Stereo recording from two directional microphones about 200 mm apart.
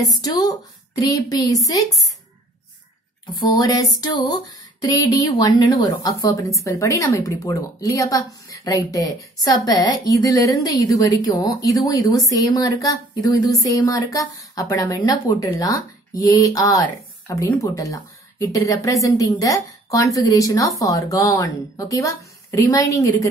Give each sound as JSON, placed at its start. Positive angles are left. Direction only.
{"t": 0.0, "sound": "a woman's voice", "side_deg": 20}
{"t": 3.5, "sound": "music", "side_deg": 20}
{"t": 4.8, "sound": "a woman's voice", "side_deg": 20}